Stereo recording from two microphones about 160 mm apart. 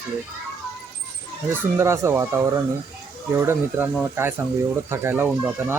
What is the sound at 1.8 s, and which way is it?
Speech, 15° right (ahead or behind).